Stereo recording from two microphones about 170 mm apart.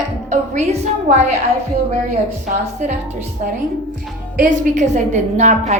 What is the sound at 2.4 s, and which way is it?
A woman's voice, 45° right (ahead or behind).